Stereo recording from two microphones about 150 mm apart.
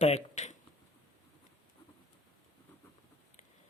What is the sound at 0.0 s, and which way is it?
Speech, 50° left (ahead or behind).